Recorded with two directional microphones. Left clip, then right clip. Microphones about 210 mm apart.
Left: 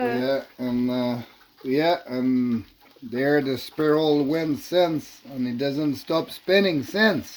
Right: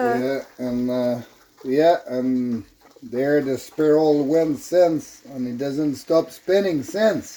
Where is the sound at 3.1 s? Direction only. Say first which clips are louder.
Right 2 dB; 40° left (ahead or behind).